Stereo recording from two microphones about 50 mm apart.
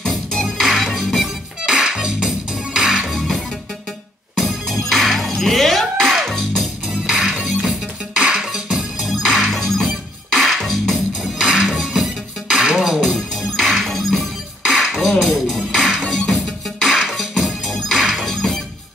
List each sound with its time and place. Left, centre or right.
0.1 s music: centre
1.6 s music: centre
6.9 s music: centre
9.1 s music: centre
11.5 s music: centre
13.1 s music: centre
15.7 s music: centre
16.3 s music: centre